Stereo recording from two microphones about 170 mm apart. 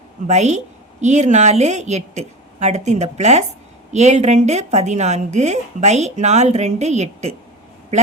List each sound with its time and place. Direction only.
0.3 s a woman's voice: 45° right (ahead or behind)